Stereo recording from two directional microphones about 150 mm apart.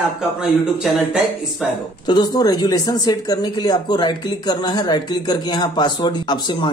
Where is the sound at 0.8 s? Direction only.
Centre (ahead or behind).